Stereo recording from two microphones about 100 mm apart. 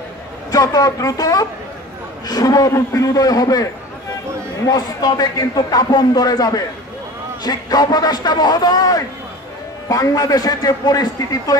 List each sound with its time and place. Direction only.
0.5 s a man's voice: 40° left (ahead or behind)
4.6 s a man's voice: 40° left (ahead or behind)